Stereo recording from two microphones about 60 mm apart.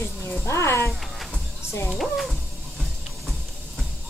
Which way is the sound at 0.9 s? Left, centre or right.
Centre.